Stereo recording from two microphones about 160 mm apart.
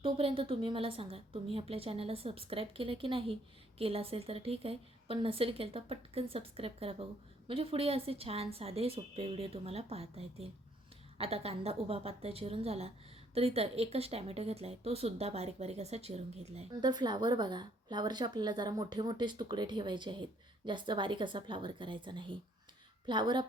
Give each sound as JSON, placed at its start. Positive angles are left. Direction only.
{"t": 0.0, "sound": "a woman's voice", "side_deg": -35}
{"t": 16.8, "sound": "a woman's voice", "side_deg": -25}